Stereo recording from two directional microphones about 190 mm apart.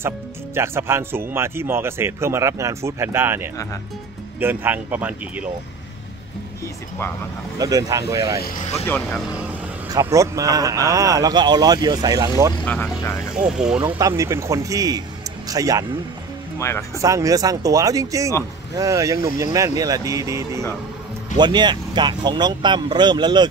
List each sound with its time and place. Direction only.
0.6 s speech: 15° right (ahead or behind)
7.5 s speech: 20° right (ahead or behind)
8.4 s speech: 50° left (ahead or behind)
8.8 s speech: 10° left (ahead or behind)
9.8 s speech: 15° right (ahead or behind)
12.6 s speech: 5° left (ahead or behind)
13.3 s speech: 5° right (ahead or behind)
13.9 s speech: 15° right (ahead or behind)
16.5 s speech: 15° left (ahead or behind)
17.0 s speech: 15° right (ahead or behind)